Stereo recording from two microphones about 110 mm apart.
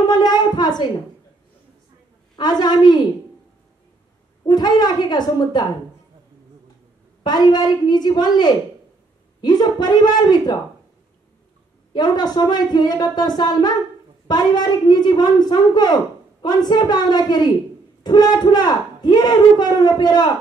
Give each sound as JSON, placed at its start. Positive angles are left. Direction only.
{"t": 0.1, "sound": "a sound", "side_deg": 40}
{"t": 2.3, "sound": "a woman's voice", "side_deg": 40}
{"t": 4.5, "sound": "a woman's voice", "side_deg": 40}
{"t": 7.2, "sound": "a woman's voice", "side_deg": 40}
{"t": 11.9, "sound": "a woman's voice", "side_deg": 40}